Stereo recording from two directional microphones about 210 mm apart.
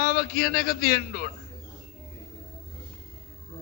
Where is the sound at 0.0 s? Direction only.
45° left (ahead or behind).